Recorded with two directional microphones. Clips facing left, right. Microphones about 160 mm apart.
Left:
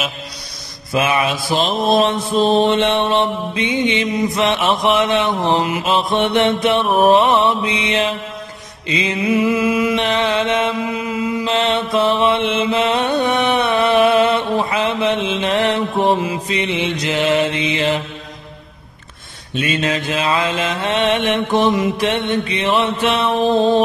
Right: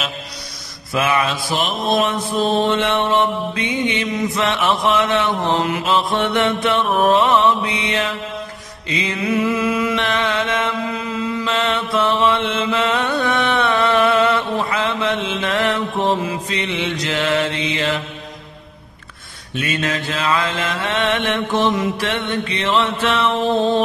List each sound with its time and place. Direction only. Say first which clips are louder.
0.9 s mantra: left 1 dB; 20° left (ahead or behind)
1.9 s mantra: left 2 dB; 30° left (ahead or behind)
9.6 s mantra: left 3 dB; 10° left (ahead or behind)
11.5 s chant: left 3 dB; 25° left (ahead or behind)
19.5 s mantra: left 3 dB; 20° left (ahead or behind)